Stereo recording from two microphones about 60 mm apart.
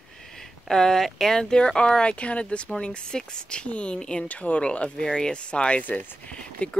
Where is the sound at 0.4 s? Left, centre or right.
Centre.